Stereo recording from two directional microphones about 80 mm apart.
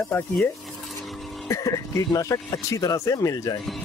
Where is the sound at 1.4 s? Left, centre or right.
Left.